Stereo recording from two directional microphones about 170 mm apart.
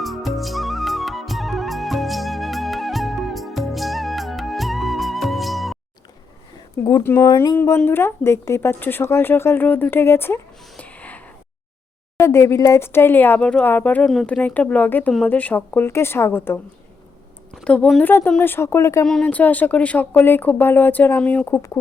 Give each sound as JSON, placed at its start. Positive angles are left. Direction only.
{"t": 0.0, "sound": "music", "side_deg": 0}
{"t": 6.8, "sound": "speech", "side_deg": 15}
{"t": 12.2, "sound": "speech", "side_deg": 15}
{"t": 19.0, "sound": "speech", "side_deg": 5}